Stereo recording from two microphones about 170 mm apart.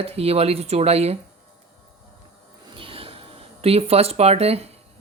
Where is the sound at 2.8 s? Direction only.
35° right (ahead or behind).